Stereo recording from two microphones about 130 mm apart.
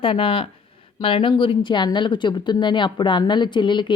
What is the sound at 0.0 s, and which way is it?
Speech, 45° left (ahead or behind).